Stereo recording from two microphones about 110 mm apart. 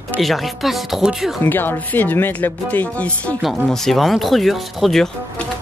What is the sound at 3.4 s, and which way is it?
Speech, centre (ahead or behind).